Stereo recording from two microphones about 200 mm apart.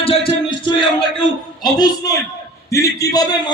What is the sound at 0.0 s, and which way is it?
Music, 25° left (ahead or behind).